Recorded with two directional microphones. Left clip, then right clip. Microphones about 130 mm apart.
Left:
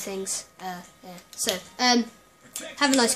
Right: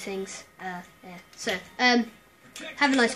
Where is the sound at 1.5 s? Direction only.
25° left (ahead or behind).